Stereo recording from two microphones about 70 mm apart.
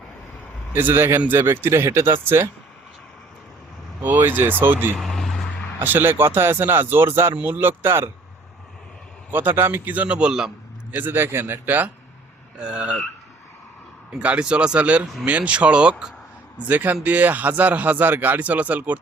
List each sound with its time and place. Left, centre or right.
0.7 s speech: right
4.0 s a man's voice: right
4.9 s vehicle: centre
5.8 s speech: right
9.3 s a man's voice: right; by 10.5 s centre
10.9 s speech: right
12.5 s speech: centre
14.2 s speech: centre
16.6 s a man's voice: right